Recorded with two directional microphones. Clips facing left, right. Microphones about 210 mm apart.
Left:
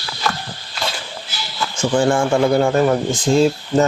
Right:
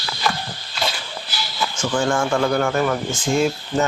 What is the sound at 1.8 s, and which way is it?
Speech, 25° left (ahead or behind).